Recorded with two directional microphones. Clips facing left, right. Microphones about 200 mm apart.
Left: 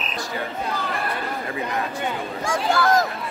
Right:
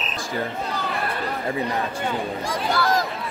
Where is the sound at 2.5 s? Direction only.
50° left (ahead or behind).